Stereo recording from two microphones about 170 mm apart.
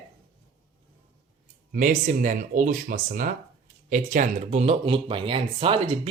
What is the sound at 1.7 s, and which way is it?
Speech, 50° right (ahead or behind).